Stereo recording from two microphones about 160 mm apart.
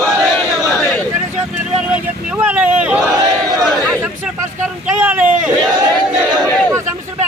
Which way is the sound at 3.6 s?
Centre (ahead or behind).